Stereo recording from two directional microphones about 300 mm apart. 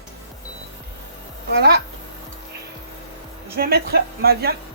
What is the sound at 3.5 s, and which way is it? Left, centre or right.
Speech, right.